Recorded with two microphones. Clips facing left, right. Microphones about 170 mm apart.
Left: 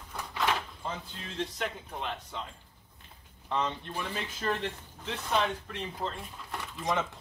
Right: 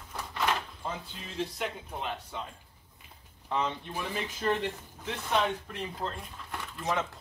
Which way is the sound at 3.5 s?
5° right (ahead or behind).